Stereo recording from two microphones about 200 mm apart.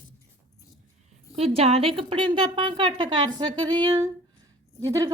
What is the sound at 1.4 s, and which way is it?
A woman's voice, 30° right (ahead or behind).